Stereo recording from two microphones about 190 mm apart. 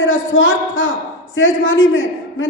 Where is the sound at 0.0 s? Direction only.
90° left.